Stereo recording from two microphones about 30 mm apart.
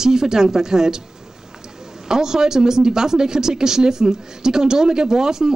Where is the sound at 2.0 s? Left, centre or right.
Right.